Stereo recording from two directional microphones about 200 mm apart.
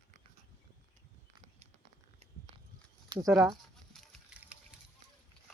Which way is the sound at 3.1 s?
20° right (ahead or behind).